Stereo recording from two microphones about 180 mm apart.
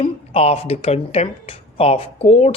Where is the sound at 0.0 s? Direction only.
35° left (ahead or behind).